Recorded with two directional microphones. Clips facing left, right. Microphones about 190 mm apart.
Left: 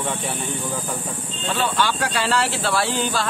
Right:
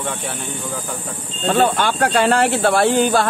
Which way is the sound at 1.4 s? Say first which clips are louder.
Right 6 dB; 50° right (ahead or behind).